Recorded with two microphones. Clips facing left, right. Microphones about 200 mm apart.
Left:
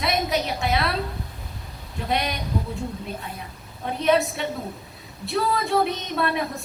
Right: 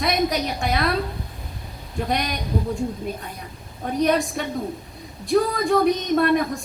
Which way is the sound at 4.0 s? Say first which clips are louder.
Even; 45° right (ahead or behind).